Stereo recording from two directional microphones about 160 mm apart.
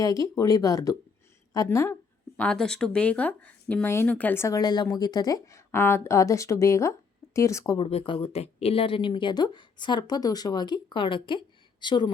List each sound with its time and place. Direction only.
0.0 s speech: 20° left (ahead or behind)
2.3 s speech: 5° left (ahead or behind)
7.8 s speech: 35° left (ahead or behind)